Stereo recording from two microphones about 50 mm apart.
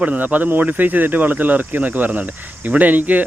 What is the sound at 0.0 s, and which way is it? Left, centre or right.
Speech, right.